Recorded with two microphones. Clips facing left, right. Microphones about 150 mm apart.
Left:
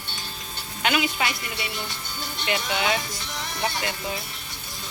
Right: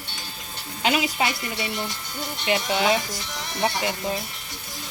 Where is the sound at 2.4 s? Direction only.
25° right (ahead or behind).